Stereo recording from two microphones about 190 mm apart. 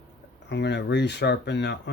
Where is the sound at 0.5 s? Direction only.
65° left (ahead or behind).